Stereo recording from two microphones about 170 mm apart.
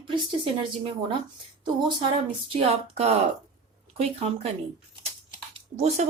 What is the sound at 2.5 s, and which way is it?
A woman's voice, 35° right (ahead or behind).